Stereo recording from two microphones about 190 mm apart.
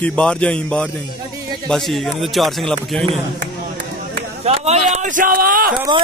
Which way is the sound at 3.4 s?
45° right (ahead or behind).